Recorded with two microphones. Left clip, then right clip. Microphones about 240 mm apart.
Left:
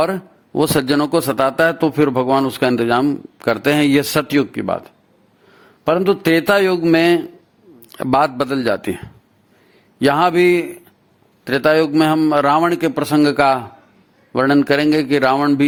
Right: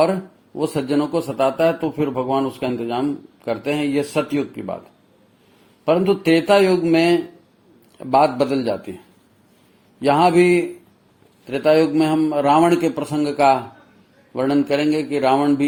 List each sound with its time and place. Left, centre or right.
0.0 s a man's voice: left
5.8 s a man's voice: left
10.0 s a man's voice: left